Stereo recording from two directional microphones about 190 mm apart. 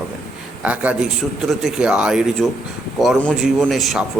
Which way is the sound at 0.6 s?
5° right (ahead or behind).